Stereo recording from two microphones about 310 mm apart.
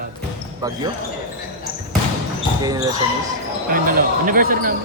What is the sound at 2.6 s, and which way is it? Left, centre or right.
Speech, centre.